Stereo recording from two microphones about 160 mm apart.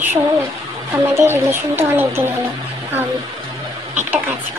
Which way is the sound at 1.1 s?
15° right (ahead or behind).